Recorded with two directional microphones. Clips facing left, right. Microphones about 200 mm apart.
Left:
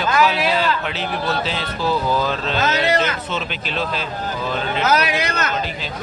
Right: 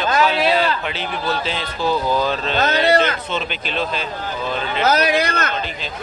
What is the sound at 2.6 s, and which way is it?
Speech, 35° right (ahead or behind).